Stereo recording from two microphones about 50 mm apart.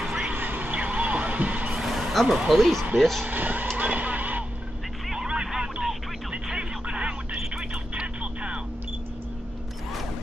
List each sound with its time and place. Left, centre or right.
0.0 s vehicle: centre
0.3 s heart sounds: right
1.7 s vehicle: centre
3.0 s speech: centre
3.3 s speech: right
3.7 s vehicle: right
5.0 s vehicle: centre
6.4 s a sound: centre